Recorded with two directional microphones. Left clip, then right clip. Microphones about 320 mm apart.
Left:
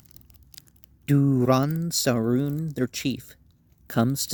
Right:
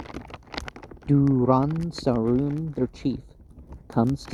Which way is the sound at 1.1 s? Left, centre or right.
Left.